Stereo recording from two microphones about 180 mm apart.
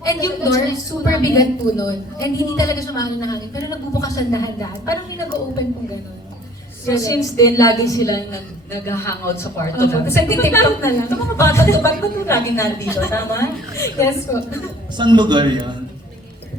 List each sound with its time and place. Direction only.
0.0 s a woman's voice: 20° left (ahead or behind)
6.8 s a woman's voice: 20° left (ahead or behind)
14.9 s a man's voice: 25° right (ahead or behind)